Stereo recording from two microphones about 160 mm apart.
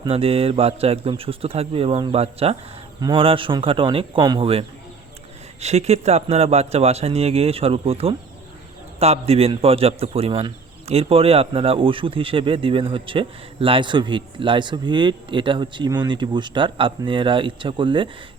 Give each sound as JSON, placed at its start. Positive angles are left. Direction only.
{"t": 0.0, "sound": "a man's voice", "side_deg": -35}